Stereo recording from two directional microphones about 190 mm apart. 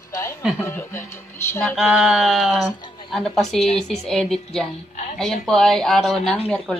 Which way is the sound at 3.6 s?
30° left (ahead or behind).